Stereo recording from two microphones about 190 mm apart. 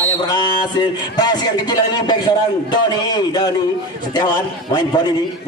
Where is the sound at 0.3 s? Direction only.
25° left (ahead or behind).